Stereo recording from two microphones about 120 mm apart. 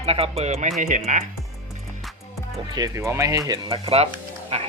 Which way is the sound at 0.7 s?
80° right.